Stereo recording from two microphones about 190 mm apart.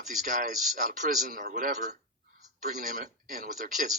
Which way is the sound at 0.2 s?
45° right (ahead or behind).